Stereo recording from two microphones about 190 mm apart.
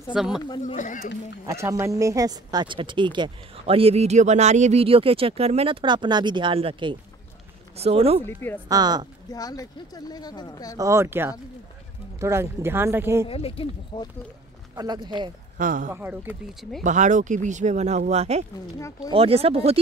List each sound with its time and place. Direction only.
0.1 s speech: centre (ahead or behind)
0.6 s speech: 40° left (ahead or behind)
1.5 s speech: 15° right (ahead or behind); by 8.2 s 30° right (ahead or behind)
8.2 s speech: 10° left (ahead or behind)
8.6 s speech: 20° right (ahead or behind)
9.3 s speech: 20° left (ahead or behind)
10.8 s speech: 15° right (ahead or behind)
13.3 s speech: 30° left (ahead or behind)
14.8 s speech: 20° right (ahead or behind)
15.5 s speech: 45° right (ahead or behind)
15.9 s speech: 10° right (ahead or behind)
16.8 s speech: 40° right (ahead or behind)